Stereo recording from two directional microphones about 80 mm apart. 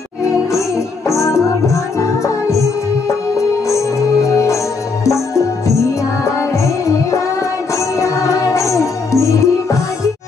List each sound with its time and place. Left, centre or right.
0.5 s music: left